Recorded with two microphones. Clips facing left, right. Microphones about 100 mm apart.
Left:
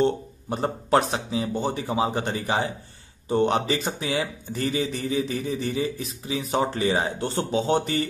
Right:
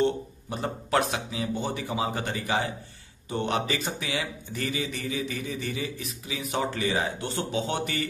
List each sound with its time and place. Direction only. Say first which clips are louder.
0.0 s speech: left 3 dB; 35° left (ahead or behind)